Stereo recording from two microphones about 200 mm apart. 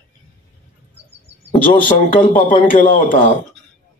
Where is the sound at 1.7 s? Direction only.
45° left (ahead or behind).